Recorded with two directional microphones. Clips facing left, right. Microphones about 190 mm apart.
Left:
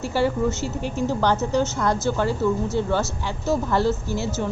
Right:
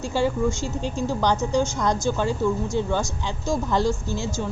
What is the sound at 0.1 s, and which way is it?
A woman's voice, 15° right (ahead or behind).